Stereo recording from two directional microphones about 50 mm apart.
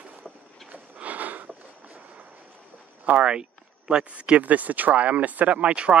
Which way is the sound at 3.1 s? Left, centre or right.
Right.